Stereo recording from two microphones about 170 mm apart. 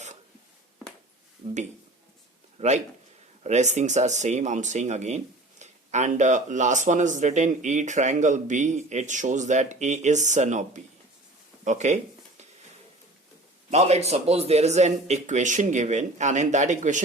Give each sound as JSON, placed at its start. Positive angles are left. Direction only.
{"t": 2.6, "sound": "speech", "side_deg": -40}
{"t": 13.7, "sound": "speech", "side_deg": -40}